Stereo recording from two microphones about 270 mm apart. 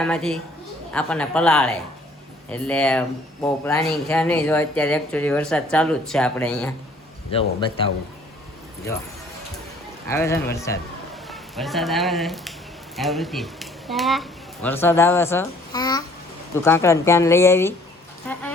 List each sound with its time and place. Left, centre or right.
0.0 s speech: centre
7.3 s a man's voice: left
10.1 s a woman's voice: centre
11.3 s a woman's voice: centre